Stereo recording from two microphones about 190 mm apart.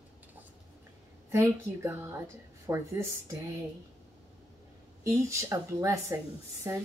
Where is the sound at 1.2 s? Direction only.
10° right (ahead or behind).